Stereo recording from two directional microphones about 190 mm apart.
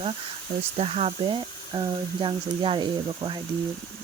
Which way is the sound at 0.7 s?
30° right (ahead or behind).